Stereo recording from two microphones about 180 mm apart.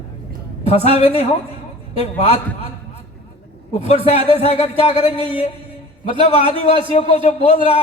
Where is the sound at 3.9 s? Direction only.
35° left (ahead or behind).